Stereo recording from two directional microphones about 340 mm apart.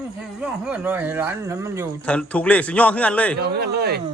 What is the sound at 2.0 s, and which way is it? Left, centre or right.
Speech, centre.